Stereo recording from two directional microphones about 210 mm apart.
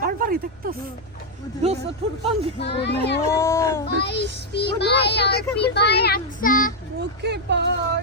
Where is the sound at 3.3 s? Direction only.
15° left (ahead or behind).